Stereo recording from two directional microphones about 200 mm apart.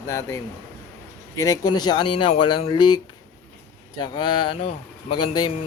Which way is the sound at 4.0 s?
20° left (ahead or behind).